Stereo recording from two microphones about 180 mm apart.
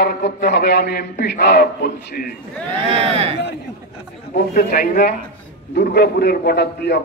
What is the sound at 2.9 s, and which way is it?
Speech, 35° right (ahead or behind).